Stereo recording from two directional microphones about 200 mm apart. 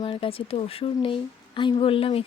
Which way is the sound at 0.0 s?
25° left (ahead or behind).